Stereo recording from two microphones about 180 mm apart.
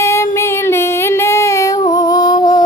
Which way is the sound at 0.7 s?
15° left (ahead or behind).